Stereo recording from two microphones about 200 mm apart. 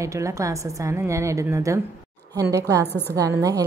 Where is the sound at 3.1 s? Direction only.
15° right (ahead or behind).